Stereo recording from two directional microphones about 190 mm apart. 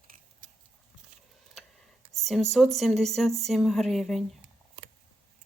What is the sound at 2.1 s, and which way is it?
Speech, centre (ahead or behind).